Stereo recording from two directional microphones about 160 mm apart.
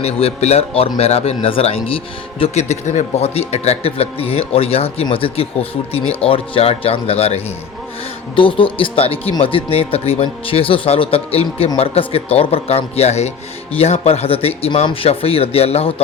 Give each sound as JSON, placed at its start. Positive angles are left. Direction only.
{"t": 0.0, "sound": "speech", "side_deg": 40}